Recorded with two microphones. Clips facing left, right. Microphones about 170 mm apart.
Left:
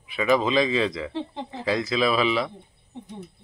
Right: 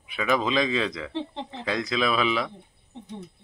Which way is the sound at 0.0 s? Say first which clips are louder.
Left 3 dB; centre (ahead or behind).